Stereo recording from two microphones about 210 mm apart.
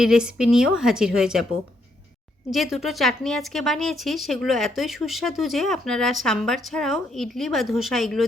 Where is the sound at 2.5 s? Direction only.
Centre (ahead or behind).